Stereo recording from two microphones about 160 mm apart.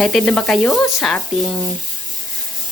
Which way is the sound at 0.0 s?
5° left (ahead or behind).